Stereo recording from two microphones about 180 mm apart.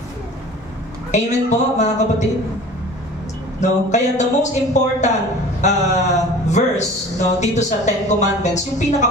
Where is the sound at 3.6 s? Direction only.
40° left (ahead or behind).